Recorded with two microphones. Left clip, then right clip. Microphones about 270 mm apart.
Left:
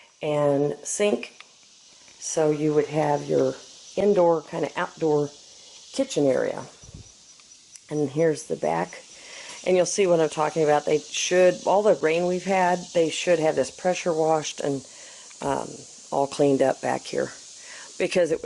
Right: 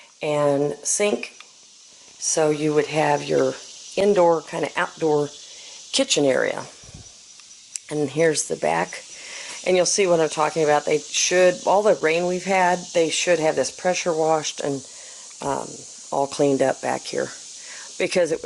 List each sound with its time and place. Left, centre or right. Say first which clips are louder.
0.2 s speech: right 2 dB; centre
2.3 s speech: right 2 dB; centre
7.9 s speech: right 3 dB; centre
16.3 s speech: right 1 dB; centre